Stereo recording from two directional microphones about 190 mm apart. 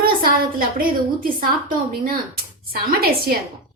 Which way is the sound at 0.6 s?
50° right (ahead or behind).